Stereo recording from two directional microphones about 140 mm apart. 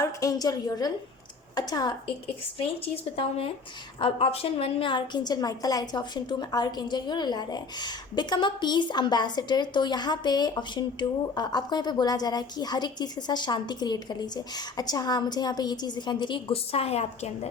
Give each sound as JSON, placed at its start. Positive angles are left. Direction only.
{"t": 0.0, "sound": "a woman's voice", "side_deg": 25}
{"t": 2.6, "sound": "a woman's voice", "side_deg": 45}